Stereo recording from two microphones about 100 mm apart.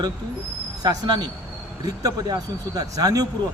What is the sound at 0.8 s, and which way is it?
Speech, 45° right (ahead or behind).